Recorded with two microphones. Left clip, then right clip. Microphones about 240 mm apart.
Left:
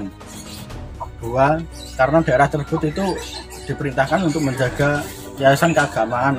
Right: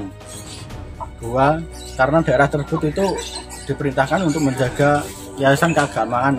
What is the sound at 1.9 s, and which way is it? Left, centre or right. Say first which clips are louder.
Speech: even; centre.